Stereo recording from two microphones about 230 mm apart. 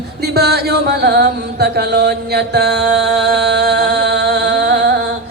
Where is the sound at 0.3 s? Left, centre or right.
Right.